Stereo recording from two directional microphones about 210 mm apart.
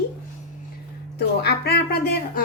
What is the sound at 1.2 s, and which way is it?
Speech, 50° left (ahead or behind).